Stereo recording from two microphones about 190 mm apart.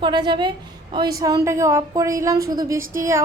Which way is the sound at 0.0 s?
25° right (ahead or behind).